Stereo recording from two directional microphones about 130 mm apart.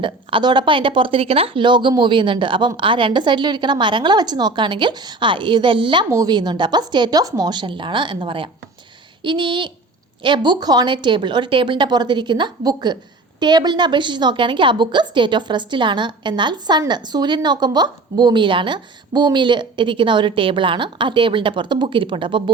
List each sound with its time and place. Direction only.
0.0 s speech: 40° right (ahead or behind)
6.1 s speech: 30° right (ahead or behind)